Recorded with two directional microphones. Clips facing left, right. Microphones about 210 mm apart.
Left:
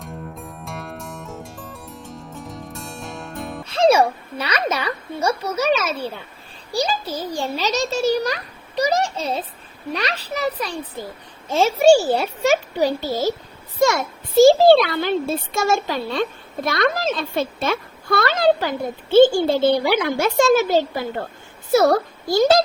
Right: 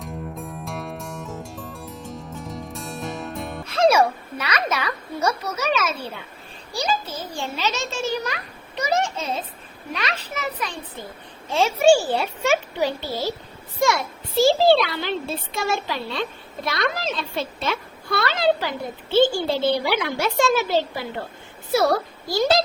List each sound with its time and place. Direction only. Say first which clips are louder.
0.0 s music: right 2 dB; centre (ahead or behind)
3.7 s a child's voice: left 2 dB; 30° left (ahead or behind); by 22.6 s 50° left (ahead or behind)